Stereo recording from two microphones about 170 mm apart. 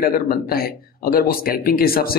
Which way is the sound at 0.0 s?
60° left (ahead or behind).